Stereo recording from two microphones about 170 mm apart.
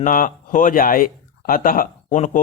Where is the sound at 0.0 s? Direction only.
50° left (ahead or behind).